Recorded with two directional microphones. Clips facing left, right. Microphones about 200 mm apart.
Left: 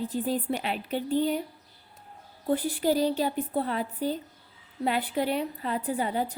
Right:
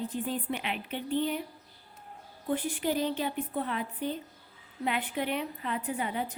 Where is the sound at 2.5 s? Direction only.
35° left (ahead or behind).